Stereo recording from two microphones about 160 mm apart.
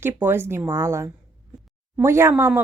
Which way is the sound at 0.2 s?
15° right (ahead or behind).